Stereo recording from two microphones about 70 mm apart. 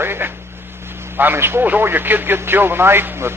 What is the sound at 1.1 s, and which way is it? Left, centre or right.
A man's voice, right.